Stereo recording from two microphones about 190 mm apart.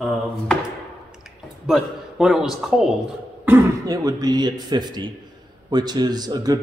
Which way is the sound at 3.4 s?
15° right (ahead or behind).